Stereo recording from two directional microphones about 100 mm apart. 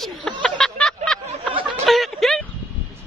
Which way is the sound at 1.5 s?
60° right (ahead or behind).